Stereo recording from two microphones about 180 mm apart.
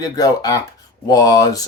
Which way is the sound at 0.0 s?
20° left (ahead or behind).